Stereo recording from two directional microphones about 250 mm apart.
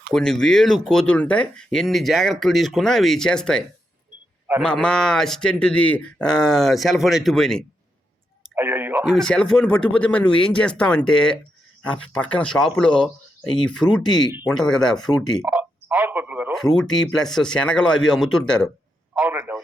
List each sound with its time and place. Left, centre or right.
0.1 s speech: centre
4.6 s speech: centre
14.0 s speech: centre
14.7 s speech: centre
15.4 s a sound: centre
17.2 s speech: centre
19.1 s a sound: centre